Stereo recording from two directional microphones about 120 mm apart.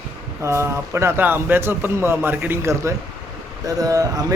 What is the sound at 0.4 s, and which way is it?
A man's voice, 20° right (ahead or behind).